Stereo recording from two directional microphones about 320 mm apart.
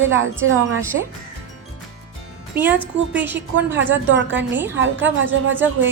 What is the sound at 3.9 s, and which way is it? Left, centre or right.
A woman's voice, right.